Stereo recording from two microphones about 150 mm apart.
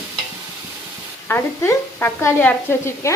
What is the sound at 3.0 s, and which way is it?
Stir, 20° left (ahead or behind).